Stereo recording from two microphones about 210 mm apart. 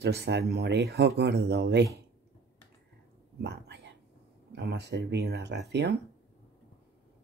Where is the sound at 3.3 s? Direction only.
55° right (ahead or behind).